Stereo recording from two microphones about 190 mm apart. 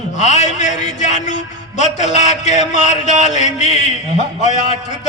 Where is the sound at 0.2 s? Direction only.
40° left (ahead or behind).